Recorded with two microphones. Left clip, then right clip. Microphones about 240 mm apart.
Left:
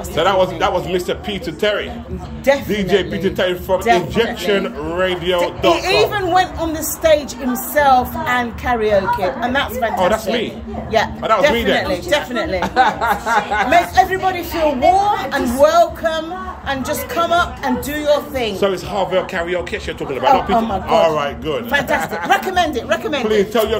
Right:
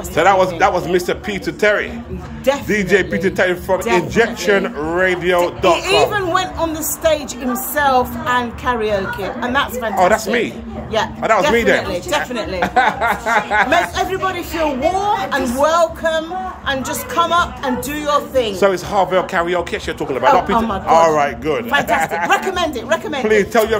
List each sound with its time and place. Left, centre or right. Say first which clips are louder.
0.1 s a man's voice: right 2 dB; centre
5.7 s a woman's voice: even; centre
9.9 s a man's voice: right 4 dB; centre
10.9 s a woman's voice: left 2 dB; centre
11.5 s a man's voice: right 3 dB; centre
11.8 s a woman's voice: left 2 dB; centre
18.6 s a man's voice: right 3 dB; centre